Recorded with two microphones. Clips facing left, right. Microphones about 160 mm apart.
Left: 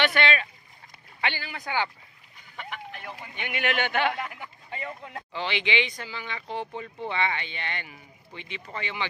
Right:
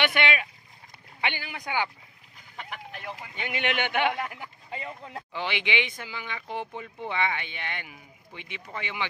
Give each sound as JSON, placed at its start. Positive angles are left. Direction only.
{"t": 0.0, "sound": "rowboat", "side_deg": -15}
{"t": 1.2, "sound": "speech", "side_deg": -15}
{"t": 3.3, "sound": "speech", "side_deg": -25}